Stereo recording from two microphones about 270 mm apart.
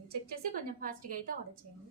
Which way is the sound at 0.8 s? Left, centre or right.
Right.